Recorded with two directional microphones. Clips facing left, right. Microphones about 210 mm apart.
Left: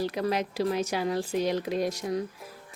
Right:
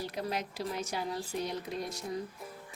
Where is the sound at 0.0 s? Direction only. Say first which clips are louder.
Left 8 dB; 90° left.